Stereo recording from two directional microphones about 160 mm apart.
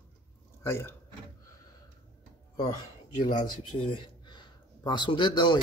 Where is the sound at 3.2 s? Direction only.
55° left (ahead or behind).